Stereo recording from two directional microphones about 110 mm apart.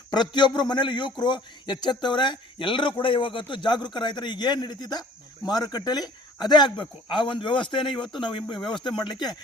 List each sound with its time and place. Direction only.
0.1 s a man's voice: 40° left (ahead or behind)